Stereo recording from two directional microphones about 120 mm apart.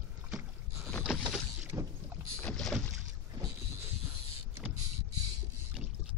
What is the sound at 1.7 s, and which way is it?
Rowboat, 20° right (ahead or behind).